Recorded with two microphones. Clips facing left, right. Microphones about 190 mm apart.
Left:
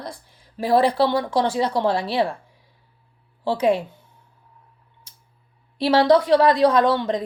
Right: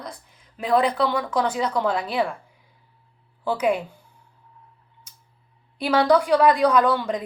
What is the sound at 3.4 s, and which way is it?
Speech, 30° left (ahead or behind).